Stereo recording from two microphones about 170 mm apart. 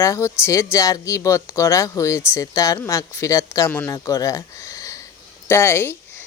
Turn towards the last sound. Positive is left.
turn(degrees=15)  # may be behind; listen again after turning